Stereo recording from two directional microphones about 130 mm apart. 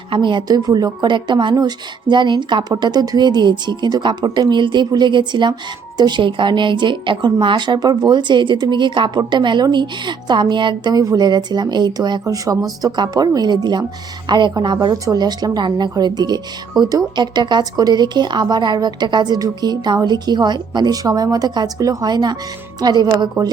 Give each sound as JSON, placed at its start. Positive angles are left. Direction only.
{"t": 0.1, "sound": "speech", "side_deg": -35}